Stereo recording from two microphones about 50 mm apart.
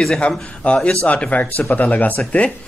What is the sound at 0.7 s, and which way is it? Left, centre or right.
Speech, left.